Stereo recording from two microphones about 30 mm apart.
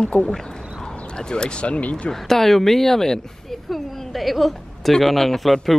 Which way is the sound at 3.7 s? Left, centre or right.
Centre.